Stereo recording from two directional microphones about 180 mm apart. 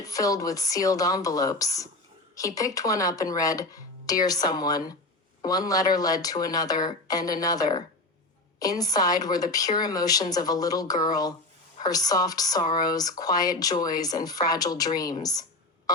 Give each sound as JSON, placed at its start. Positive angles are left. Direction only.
{"t": 0.0, "sound": "a woman's voice", "side_deg": 20}